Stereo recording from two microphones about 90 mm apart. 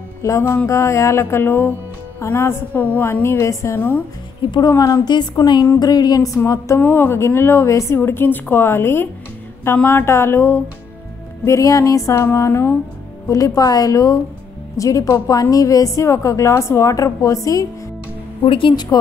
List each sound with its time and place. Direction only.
0.2 s a woman's voice: 30° left (ahead or behind)
4.5 s a woman's voice: 45° left (ahead or behind)
5.4 s a woman's voice: 55° left (ahead or behind); by 6.8 s 35° left (ahead or behind)
6.8 s speech: 25° left (ahead or behind)
11.4 s a woman's voice: 35° left (ahead or behind)
13.3 s a woman's voice: 40° left (ahead or behind)
18.4 s speech: 75° left (ahead or behind)